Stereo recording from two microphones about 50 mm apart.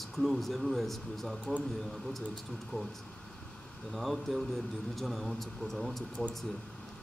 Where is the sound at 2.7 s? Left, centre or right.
Left.